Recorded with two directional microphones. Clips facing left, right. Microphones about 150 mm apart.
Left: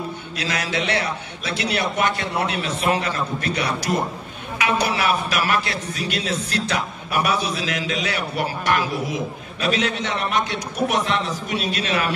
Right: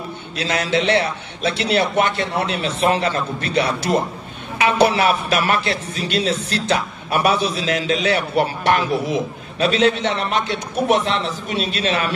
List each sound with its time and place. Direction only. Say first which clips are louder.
0.4 s a man's voice: right 6 dB; 25° right (ahead or behind)